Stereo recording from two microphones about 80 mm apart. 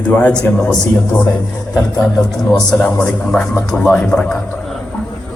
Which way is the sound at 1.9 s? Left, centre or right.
Left.